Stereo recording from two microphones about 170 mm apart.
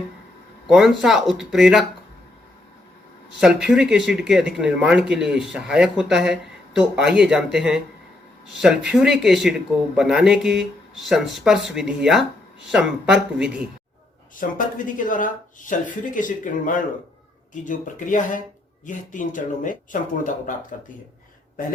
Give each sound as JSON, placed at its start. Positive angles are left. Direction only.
{"t": 0.7, "sound": "speech", "side_deg": 0}
{"t": 3.4, "sound": "speech", "side_deg": -5}
{"t": 14.4, "sound": "speech", "side_deg": 55}